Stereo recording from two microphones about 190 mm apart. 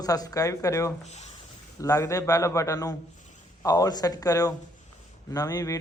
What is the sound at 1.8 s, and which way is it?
A man's voice, 15° left (ahead or behind).